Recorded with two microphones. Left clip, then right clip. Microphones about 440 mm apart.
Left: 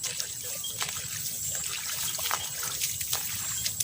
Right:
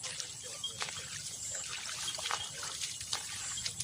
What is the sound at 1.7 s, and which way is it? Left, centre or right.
Trickle, right.